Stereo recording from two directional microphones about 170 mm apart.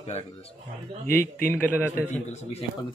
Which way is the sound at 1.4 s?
10° left (ahead or behind).